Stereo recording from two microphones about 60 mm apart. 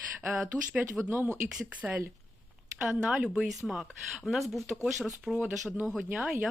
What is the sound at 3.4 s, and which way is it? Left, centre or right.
Speech, centre.